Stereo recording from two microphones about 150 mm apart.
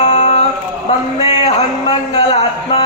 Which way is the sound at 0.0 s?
50° left (ahead or behind).